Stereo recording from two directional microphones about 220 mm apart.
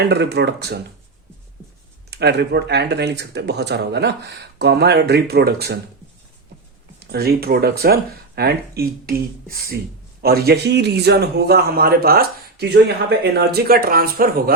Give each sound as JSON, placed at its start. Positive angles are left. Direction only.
{"t": 0.0, "sound": "a man's voice", "side_deg": -50}
{"t": 2.0, "sound": "a man's voice", "side_deg": -50}
{"t": 7.1, "sound": "a man's voice", "side_deg": -45}
{"t": 10.2, "sound": "a man's voice", "side_deg": -45}